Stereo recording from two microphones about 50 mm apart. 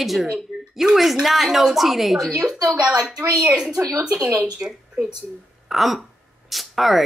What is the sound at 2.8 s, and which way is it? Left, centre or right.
Speech, centre.